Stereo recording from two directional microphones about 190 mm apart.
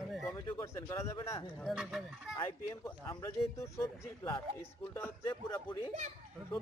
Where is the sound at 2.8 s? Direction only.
15° left (ahead or behind).